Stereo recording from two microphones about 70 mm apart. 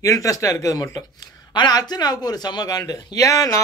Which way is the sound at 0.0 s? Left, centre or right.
Left.